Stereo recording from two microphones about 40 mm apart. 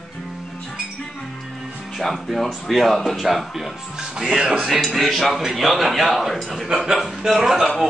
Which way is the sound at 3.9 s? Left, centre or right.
Centre.